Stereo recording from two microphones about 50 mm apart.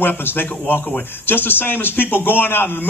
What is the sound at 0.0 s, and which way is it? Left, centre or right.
Speech, left.